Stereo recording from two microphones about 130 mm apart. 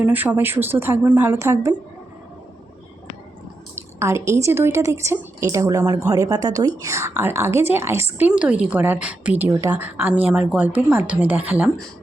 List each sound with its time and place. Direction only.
0.0 s a woman's voice: 15° right (ahead or behind)
4.0 s a woman's voice: 20° right (ahead or behind)
8.3 s a woman's voice: 10° right (ahead or behind)